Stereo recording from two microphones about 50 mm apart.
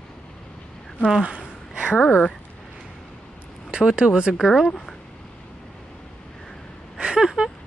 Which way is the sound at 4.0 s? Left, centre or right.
Centre.